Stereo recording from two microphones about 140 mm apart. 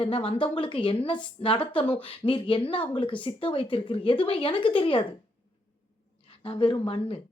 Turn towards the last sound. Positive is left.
turn(degrees=40)  # may be behind; listen again after turning